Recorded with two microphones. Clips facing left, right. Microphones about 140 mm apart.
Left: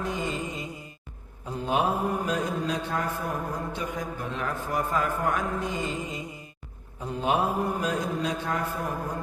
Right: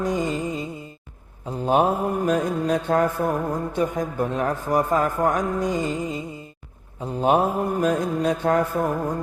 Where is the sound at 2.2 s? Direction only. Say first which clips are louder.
Right 7 dB; 50° right (ahead or behind).